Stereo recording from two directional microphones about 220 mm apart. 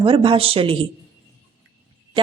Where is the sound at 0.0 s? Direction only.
25° right (ahead or behind).